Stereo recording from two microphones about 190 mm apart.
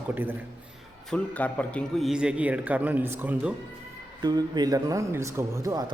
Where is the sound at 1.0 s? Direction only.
5° left (ahead or behind); by 3.5 s 10° right (ahead or behind).